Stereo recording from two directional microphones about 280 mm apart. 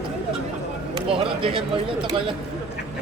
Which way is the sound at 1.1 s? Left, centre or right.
Centre.